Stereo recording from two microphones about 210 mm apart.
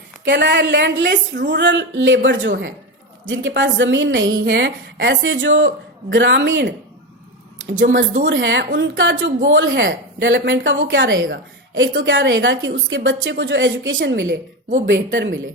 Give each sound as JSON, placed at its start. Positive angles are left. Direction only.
{"t": 0.3, "sound": "a woman's voice", "side_deg": -55}
{"t": 8.3, "sound": "a woman's voice", "side_deg": -60}